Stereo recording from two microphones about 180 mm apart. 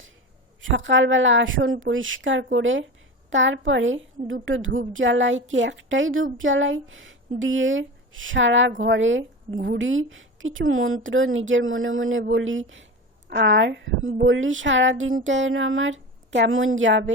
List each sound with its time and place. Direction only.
0.6 s a woman's voice: 90° right
13.3 s a woman's voice: 70° right (ahead or behind)